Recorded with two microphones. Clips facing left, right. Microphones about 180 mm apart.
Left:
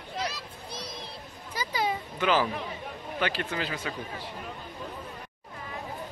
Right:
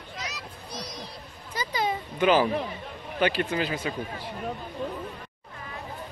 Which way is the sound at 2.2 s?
15° right (ahead or behind).